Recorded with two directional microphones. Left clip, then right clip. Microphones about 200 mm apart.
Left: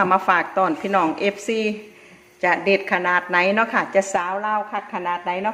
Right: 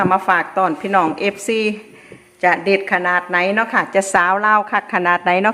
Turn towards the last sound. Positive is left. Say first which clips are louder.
# right 8 dB
turn(degrees=-40)  # may be behind; listen again after turning